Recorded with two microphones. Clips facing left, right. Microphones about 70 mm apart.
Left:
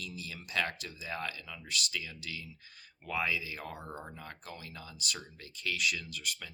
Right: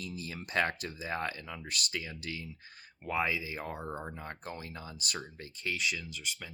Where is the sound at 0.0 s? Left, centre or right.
Right.